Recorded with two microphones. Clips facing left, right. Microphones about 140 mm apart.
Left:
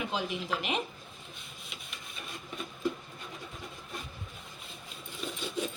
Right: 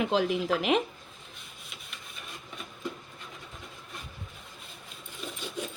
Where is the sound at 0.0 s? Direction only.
90° right.